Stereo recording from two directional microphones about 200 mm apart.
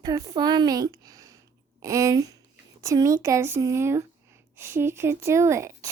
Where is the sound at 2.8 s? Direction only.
15° right (ahead or behind).